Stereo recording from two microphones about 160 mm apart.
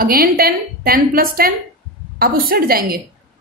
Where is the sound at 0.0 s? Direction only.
70° right (ahead or behind).